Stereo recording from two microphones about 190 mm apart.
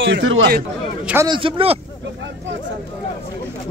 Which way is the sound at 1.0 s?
10° right (ahead or behind).